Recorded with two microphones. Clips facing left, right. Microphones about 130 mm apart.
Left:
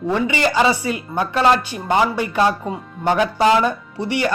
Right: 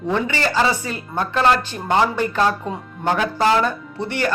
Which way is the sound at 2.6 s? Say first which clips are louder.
Left 1 dB; 5° left (ahead or behind).